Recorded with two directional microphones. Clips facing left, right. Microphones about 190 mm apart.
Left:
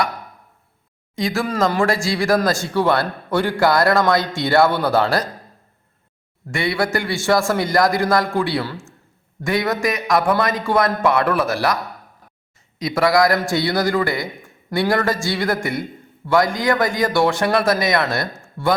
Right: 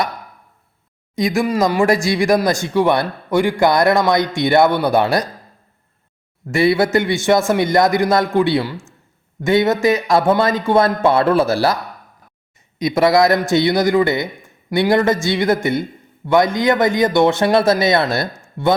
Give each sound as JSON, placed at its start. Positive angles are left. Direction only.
{"t": 1.1, "sound": "speech", "side_deg": -20}
{"t": 6.5, "sound": "a man's voice", "side_deg": -25}
{"t": 12.8, "sound": "a man's voice", "side_deg": -20}